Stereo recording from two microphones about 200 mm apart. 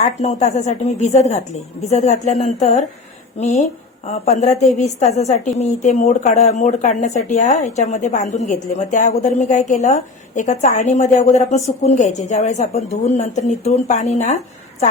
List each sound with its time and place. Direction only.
0.0 s a woman's voice: 35° left (ahead or behind)